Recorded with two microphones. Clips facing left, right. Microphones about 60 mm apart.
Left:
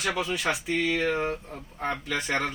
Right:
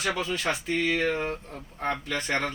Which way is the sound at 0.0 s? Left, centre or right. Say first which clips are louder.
Even; centre.